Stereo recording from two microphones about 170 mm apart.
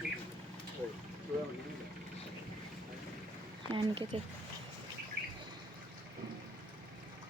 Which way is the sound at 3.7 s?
30° right (ahead or behind).